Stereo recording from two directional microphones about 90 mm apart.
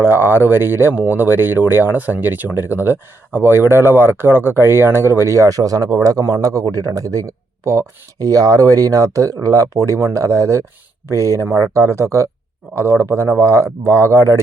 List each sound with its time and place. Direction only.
0.0 s speech: 25° right (ahead or behind)